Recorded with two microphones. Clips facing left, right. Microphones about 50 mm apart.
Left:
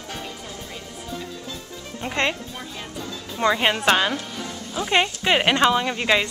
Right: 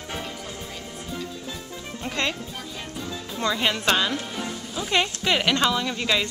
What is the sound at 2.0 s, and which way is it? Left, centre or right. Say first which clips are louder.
Speech: left 4 dB; left.